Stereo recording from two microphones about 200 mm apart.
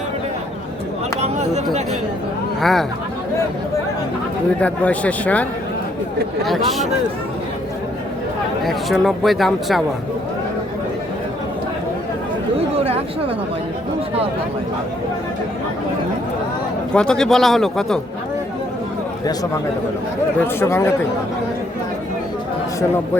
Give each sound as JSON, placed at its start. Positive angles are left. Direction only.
{"t": 1.2, "sound": "speech", "side_deg": -35}
{"t": 2.6, "sound": "speech", "side_deg": 0}
{"t": 4.6, "sound": "speech", "side_deg": 5}
{"t": 8.6, "sound": "speech", "side_deg": 0}
{"t": 12.5, "sound": "speech", "side_deg": -30}
{"t": 16.9, "sound": "speech", "side_deg": 5}
{"t": 20.6, "sound": "speech", "side_deg": 10}